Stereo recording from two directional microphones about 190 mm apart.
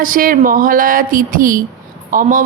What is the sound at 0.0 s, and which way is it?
A woman's voice, 45° right (ahead or behind).